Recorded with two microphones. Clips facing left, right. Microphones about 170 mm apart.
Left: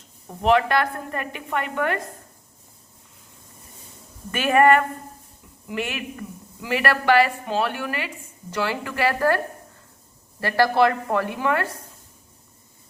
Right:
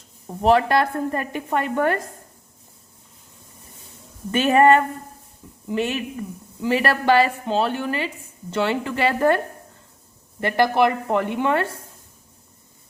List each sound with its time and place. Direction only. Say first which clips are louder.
0.4 s a woman's voice: right 2 dB; 35° right (ahead or behind)
4.3 s speech: right 2 dB; 25° right (ahead or behind)
10.4 s speech: even; 20° right (ahead or behind)